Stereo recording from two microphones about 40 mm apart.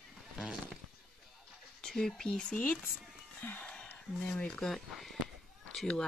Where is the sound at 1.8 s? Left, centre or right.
Centre.